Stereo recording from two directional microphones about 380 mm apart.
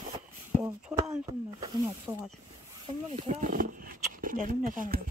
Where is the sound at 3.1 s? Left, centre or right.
Centre.